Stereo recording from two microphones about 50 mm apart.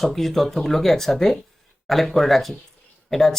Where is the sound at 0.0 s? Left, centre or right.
Centre.